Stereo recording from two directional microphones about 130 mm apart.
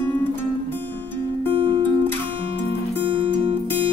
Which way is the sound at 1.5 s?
45° right (ahead or behind).